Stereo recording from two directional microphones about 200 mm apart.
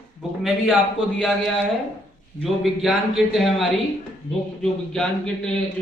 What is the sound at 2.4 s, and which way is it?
Speech, centre (ahead or behind).